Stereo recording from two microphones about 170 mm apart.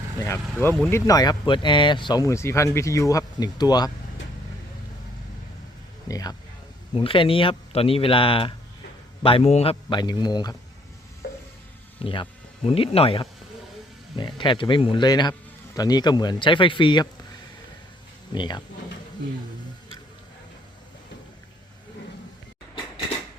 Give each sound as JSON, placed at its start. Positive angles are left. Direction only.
{"t": 0.3, "sound": "speech", "side_deg": 10}
{"t": 6.1, "sound": "speech", "side_deg": 20}
{"t": 6.9, "sound": "speech", "side_deg": 30}
{"t": 9.9, "sound": "speech", "side_deg": 25}
{"t": 12.0, "sound": "speech", "side_deg": 30}
{"t": 18.3, "sound": "speech", "side_deg": 25}